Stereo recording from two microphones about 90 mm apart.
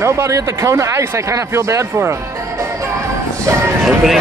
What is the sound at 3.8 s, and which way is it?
Speech, 5° right (ahead or behind).